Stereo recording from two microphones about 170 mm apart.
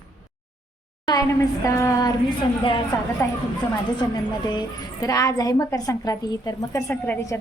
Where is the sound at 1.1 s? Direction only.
20° left (ahead or behind).